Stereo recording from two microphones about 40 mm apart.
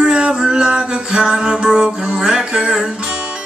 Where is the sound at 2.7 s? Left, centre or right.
Centre.